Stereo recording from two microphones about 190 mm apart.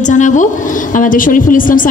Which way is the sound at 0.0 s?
40° left (ahead or behind).